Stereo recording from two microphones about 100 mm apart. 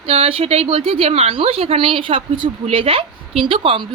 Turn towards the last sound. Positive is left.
turn(degrees=-60)  # may be behind; listen again after turning